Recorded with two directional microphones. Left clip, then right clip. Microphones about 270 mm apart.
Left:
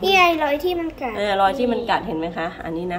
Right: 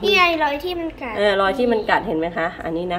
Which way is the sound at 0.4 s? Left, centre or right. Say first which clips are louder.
Left 1 dB; centre.